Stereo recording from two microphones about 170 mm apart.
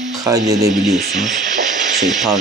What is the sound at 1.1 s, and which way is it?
Speech, 45° right (ahead or behind).